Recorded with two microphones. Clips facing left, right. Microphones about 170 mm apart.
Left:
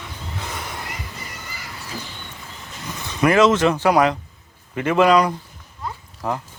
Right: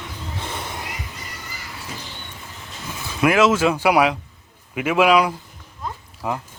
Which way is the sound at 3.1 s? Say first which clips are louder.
Left 1 dB; 5° right (ahead or behind).